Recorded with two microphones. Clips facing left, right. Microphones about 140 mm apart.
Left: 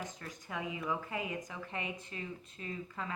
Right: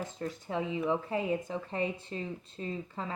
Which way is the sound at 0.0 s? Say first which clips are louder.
Right 7 dB; 30° right (ahead or behind).